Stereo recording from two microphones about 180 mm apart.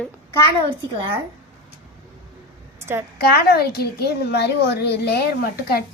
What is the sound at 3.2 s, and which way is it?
A woman's voice, 60° left (ahead or behind).